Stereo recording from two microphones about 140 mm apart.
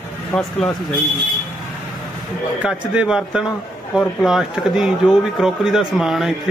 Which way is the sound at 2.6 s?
10° right (ahead or behind).